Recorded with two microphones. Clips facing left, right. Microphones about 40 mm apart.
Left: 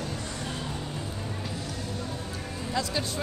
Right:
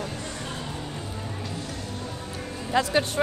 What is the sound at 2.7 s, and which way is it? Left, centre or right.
Speech, right.